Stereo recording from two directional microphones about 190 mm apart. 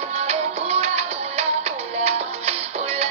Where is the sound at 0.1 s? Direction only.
35° right (ahead or behind).